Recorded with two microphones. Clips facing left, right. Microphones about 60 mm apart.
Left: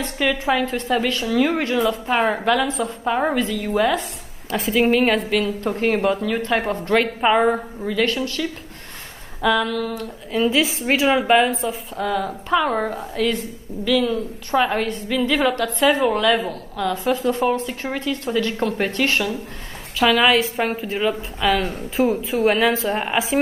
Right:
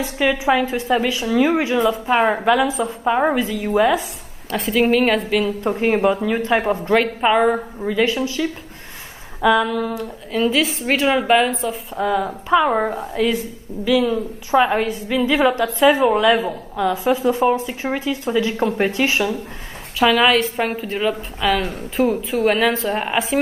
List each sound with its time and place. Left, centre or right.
0.0 s a woman's voice: centre
9.9 s a woman's voice: centre
12.9 s a woman's voice: centre
16.9 s a woman's voice: centre